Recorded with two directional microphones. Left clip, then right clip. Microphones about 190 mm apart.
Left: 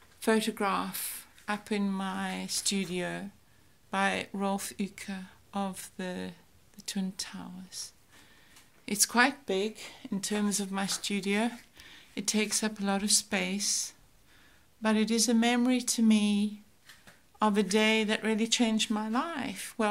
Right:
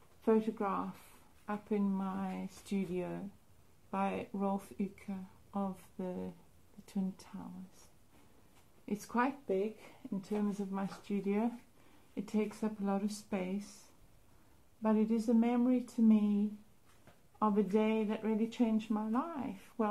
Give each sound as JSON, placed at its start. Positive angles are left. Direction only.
{"t": 0.2, "sound": "speech", "side_deg": 25}
{"t": 9.0, "sound": "speech", "side_deg": 30}
{"t": 14.8, "sound": "speech", "side_deg": 10}
{"t": 15.1, "sound": "speech", "side_deg": 30}
{"t": 15.4, "sound": "speech", "side_deg": 15}